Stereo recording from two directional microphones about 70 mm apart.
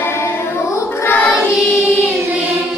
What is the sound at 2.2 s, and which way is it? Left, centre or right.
Music, right.